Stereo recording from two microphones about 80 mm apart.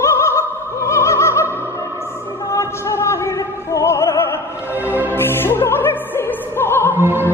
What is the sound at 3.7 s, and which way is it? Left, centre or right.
Opera, left.